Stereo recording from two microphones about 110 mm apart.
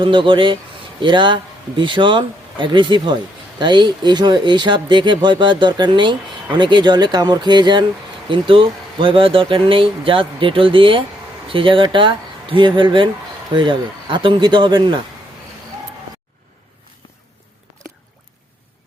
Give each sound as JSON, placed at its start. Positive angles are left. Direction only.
{"t": 0.0, "sound": "speech", "side_deg": -50}